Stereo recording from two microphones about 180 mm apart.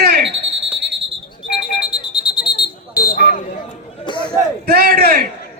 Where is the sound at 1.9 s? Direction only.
25° left (ahead or behind).